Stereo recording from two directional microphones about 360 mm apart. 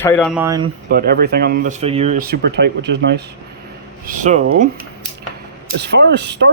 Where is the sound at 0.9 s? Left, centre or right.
Right.